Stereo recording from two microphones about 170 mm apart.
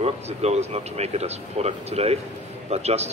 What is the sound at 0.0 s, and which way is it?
Speech, 40° right (ahead or behind).